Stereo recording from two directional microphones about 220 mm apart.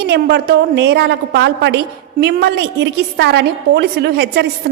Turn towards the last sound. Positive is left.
turn(degrees=-50)  # may be behind; listen again after turning